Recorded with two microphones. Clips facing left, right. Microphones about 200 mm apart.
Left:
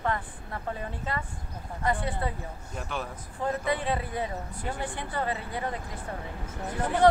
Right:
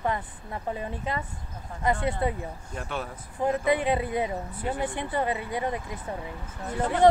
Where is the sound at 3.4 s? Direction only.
20° right (ahead or behind).